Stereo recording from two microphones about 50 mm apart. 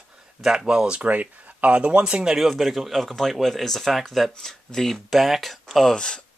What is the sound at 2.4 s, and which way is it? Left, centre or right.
Speech, centre.